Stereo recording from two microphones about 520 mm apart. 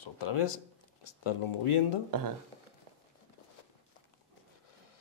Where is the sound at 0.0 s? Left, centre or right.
Left.